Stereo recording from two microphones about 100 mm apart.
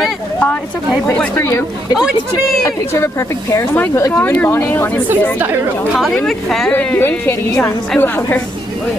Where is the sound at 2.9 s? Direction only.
25° left (ahead or behind).